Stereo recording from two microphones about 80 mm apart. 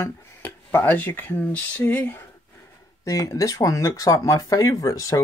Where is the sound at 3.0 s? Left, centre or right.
Left.